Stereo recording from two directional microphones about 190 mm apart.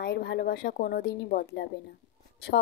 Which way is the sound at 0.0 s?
65° left (ahead or behind).